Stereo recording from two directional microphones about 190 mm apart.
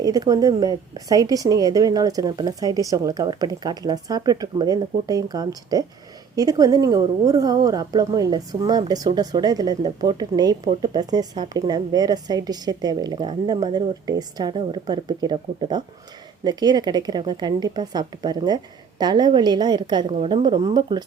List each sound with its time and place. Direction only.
0.0 s a woman's voice: 20° right (ahead or behind)